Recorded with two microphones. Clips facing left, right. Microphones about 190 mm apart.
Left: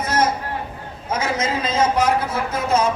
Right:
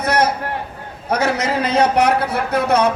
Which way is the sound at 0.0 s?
70° right (ahead or behind).